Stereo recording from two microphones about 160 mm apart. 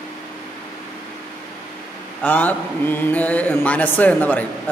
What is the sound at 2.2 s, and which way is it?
Speech, 10° left (ahead or behind).